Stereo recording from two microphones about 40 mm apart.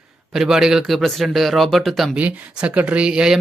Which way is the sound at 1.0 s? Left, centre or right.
Centre.